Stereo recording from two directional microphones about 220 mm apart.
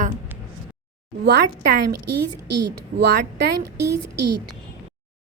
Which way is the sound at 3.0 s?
50° right (ahead or behind).